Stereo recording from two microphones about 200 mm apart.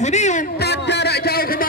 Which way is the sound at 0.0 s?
35° left (ahead or behind).